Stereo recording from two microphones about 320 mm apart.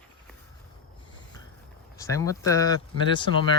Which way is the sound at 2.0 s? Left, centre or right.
Centre.